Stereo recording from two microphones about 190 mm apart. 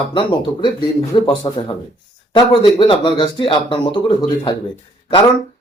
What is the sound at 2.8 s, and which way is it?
Speech, 25° left (ahead or behind).